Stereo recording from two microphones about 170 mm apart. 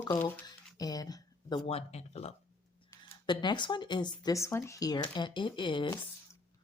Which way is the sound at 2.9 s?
20° left (ahead or behind).